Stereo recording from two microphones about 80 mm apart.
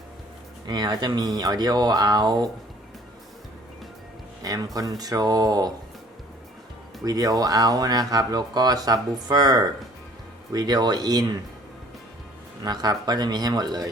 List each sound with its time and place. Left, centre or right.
0.7 s speech: right
4.4 s speech: right
7.0 s speech: right
12.6 s speech: right